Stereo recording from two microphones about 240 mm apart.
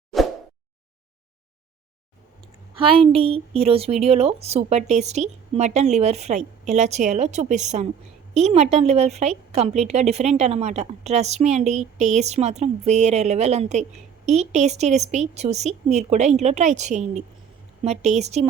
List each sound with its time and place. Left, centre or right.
2.7 s a woman's voice: right